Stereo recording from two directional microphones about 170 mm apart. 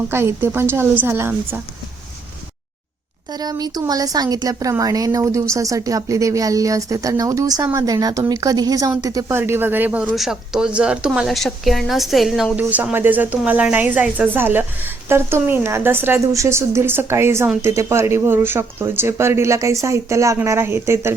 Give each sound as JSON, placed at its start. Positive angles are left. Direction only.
{"t": 0.1, "sound": "speech", "side_deg": -15}
{"t": 3.3, "sound": "speech", "side_deg": -25}